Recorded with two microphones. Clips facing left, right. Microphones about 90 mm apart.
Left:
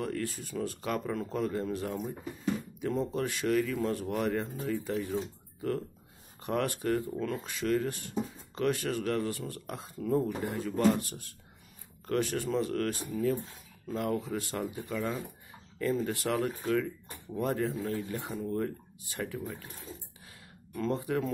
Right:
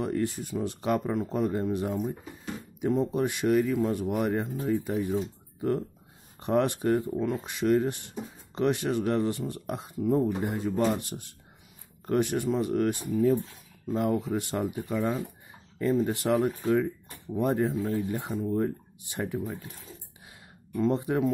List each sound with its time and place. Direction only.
0.0 s speech: 20° right (ahead or behind)
20.7 s speech: 20° right (ahead or behind)